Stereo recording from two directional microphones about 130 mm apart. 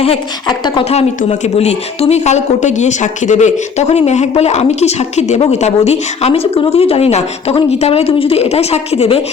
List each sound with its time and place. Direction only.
0.4 s speech: 35° left (ahead or behind)
0.9 s speech: 50° left (ahead or behind)